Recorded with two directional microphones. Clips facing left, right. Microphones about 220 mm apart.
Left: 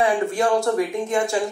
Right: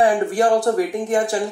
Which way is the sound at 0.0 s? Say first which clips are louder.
Right 3 dB; 35° right (ahead or behind).